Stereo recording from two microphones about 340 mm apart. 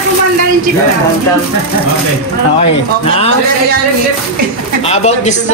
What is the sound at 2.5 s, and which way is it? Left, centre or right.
Speech, centre.